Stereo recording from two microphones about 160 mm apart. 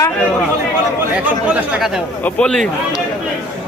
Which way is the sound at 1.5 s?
5° right (ahead or behind).